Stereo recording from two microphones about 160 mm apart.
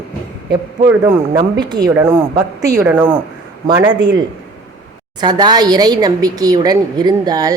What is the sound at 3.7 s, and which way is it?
Speech, 25° right (ahead or behind).